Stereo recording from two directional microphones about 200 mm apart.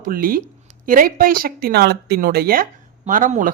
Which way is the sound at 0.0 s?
45° right (ahead or behind).